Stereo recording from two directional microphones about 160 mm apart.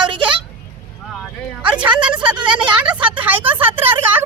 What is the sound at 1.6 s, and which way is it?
A woman's voice, 5° right (ahead or behind).